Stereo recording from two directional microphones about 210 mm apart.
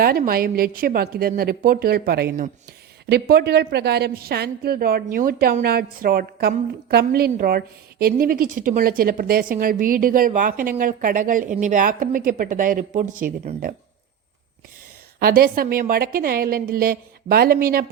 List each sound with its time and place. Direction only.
0.0 s a woman's voice: 45° right (ahead or behind)
15.2 s a woman's voice: 45° right (ahead or behind)